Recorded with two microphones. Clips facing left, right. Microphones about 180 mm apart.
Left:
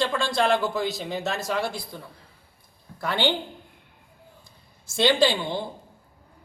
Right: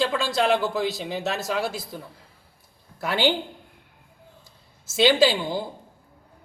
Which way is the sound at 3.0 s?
10° right (ahead or behind).